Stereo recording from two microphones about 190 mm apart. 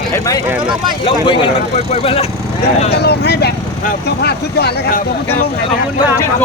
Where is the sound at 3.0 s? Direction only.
60° left (ahead or behind).